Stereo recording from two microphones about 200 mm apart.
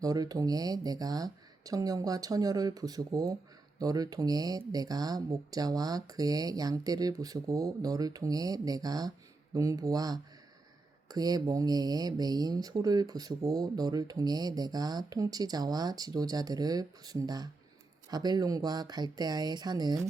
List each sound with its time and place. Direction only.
0.0 s speech: 20° right (ahead or behind)